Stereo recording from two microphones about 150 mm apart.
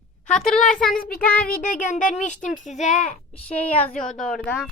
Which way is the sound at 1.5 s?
60° left (ahead or behind).